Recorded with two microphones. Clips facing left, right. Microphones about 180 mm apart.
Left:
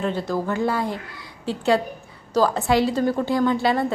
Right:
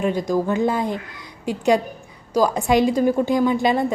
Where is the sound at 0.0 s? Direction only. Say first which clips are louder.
Right 4 dB; 15° right (ahead or behind).